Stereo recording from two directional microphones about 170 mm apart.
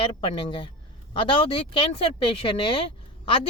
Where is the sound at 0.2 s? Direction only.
30° left (ahead or behind).